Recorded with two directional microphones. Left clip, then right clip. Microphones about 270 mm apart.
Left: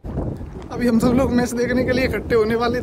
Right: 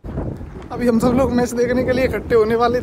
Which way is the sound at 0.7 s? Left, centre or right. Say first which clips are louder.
Right 2 dB; centre.